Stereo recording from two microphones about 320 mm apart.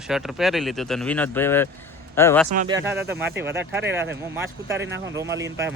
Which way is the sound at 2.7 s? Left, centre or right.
Centre.